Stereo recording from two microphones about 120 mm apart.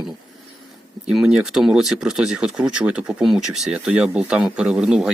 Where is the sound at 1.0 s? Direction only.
5° right (ahead or behind).